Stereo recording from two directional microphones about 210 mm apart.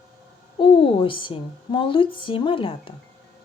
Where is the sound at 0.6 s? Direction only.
25° left (ahead or behind).